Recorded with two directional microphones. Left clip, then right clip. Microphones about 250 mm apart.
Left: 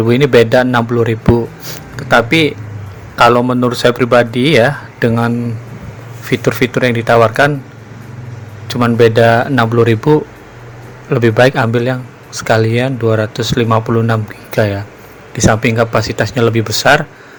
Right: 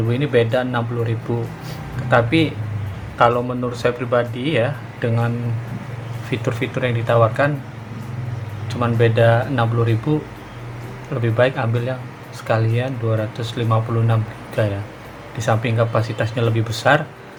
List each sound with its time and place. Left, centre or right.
0.1 s speech: left
6.3 s speech: left
8.6 s speech: left